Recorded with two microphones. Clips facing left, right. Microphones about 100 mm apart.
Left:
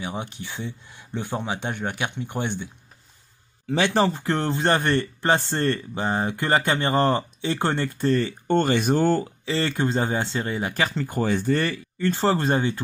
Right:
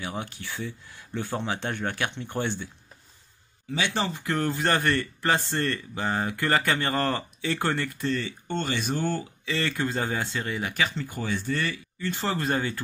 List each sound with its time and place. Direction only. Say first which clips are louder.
0.0 s speech: left 2 dB; 20° left (ahead or behind)
3.6 s speech: left 6 dB; 60° left (ahead or behind)
3.9 s speech: left 6 dB; 35° left (ahead or behind)
8.1 s speech: left 12 dB; 50° left (ahead or behind)
9.2 s speech: left 4 dB; 35° left (ahead or behind)